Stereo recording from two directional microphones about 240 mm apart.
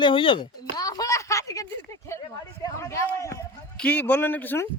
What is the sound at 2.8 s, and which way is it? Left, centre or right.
Speech, centre.